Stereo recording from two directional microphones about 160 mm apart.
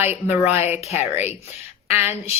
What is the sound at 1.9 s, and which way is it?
Speech, 15° right (ahead or behind).